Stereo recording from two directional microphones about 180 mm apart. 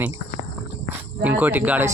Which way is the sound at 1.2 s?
10° right (ahead or behind).